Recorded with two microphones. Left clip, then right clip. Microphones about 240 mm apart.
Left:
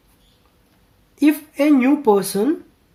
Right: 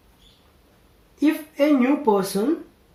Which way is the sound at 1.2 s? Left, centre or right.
Left.